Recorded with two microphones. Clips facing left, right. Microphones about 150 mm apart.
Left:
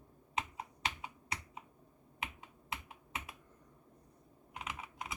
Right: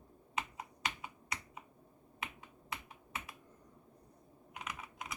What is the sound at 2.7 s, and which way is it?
Computer keyboard, 20° left (ahead or behind).